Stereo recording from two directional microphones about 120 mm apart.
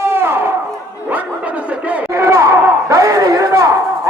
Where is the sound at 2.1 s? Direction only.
25° right (ahead or behind).